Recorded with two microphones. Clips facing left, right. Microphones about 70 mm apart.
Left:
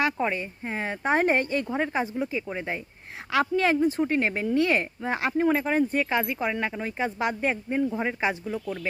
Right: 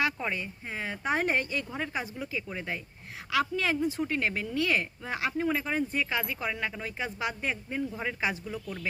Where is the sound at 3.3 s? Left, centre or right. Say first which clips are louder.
Left 5 dB; left.